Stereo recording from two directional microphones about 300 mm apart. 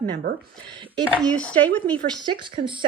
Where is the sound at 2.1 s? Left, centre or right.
Centre.